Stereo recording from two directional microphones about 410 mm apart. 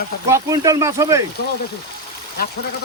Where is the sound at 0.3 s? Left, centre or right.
Centre.